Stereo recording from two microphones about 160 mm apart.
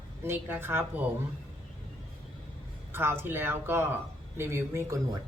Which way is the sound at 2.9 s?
15° right (ahead or behind).